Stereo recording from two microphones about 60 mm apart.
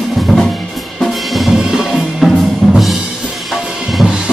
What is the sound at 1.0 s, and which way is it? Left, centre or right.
Music, centre.